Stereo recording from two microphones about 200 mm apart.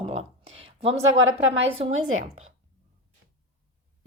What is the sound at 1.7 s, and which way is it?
Speech, 30° right (ahead or behind).